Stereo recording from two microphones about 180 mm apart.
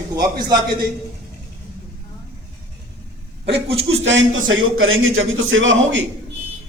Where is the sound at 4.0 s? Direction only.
90° right.